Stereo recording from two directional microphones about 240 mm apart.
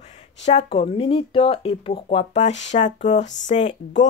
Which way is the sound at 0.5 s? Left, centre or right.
Left.